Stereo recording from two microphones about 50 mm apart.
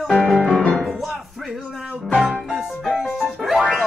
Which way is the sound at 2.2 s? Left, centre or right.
Centre.